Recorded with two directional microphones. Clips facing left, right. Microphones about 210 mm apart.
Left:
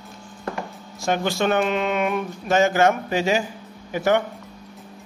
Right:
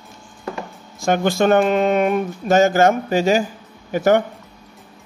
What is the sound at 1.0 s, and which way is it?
Speech, 50° right (ahead or behind).